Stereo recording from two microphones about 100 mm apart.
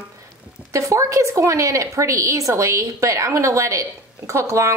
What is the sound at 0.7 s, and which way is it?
A woman's voice, 30° right (ahead or behind).